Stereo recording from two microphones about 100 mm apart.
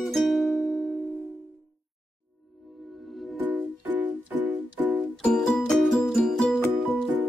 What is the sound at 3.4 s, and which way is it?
Music, 20° right (ahead or behind).